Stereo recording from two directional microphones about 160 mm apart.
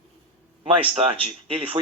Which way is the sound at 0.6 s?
35° right (ahead or behind).